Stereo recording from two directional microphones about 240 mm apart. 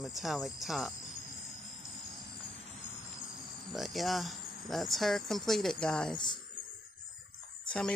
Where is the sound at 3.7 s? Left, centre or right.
Centre.